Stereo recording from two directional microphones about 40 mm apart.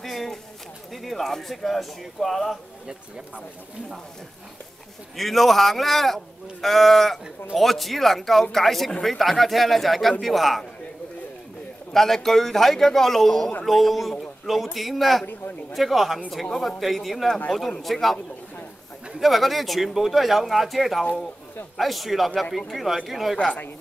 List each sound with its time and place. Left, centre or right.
0.0 s a sound: centre
1.0 s a man's voice: centre
5.1 s a man's voice: centre
11.9 s a man's voice: centre
19.1 s a man's voice: centre